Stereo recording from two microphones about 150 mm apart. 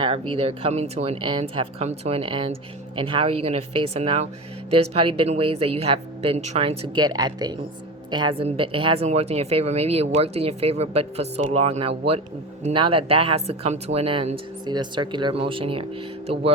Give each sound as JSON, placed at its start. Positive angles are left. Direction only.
{"t": 0.0, "sound": "a woman's voice", "side_deg": -35}